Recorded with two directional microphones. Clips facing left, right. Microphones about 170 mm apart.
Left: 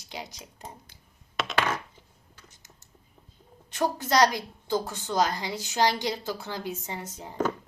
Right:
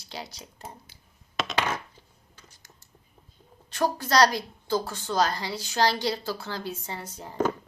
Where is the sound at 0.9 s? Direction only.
5° right (ahead or behind).